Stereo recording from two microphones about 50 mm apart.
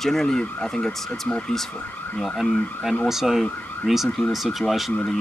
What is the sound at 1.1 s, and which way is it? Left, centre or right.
Speech, left.